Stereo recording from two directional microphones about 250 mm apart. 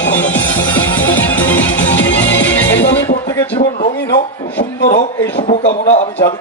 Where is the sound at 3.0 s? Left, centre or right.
Centre.